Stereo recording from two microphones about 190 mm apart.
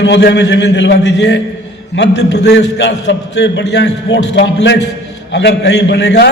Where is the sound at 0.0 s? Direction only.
65° left (ahead or behind).